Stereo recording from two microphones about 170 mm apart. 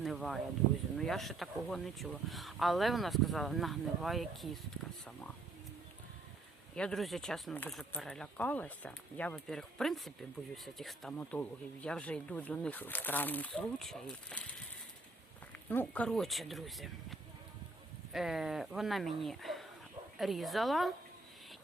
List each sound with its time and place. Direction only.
0.0 s speech: centre (ahead or behind)
6.7 s speech: 5° left (ahead or behind)
15.7 s speech: 10° left (ahead or behind)